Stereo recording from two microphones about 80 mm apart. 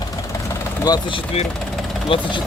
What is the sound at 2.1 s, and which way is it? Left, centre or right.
Speech, left.